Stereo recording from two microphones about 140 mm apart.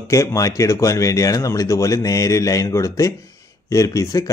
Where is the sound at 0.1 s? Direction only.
20° left (ahead or behind).